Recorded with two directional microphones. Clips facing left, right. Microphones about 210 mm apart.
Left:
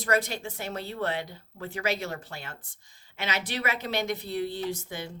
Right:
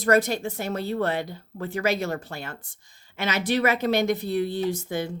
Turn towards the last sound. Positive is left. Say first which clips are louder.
# right 7 dB
turn(degrees=-45)  # may be behind; listen again after turning